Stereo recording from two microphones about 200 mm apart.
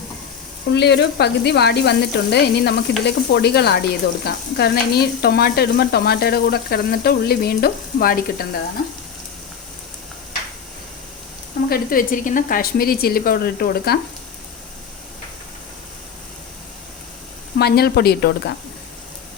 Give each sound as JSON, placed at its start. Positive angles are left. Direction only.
{"t": 0.7, "sound": "speech", "side_deg": 60}
{"t": 3.0, "sound": "frying", "side_deg": 55}
{"t": 11.7, "sound": "frying", "side_deg": 45}
{"t": 17.6, "sound": "frying", "side_deg": 50}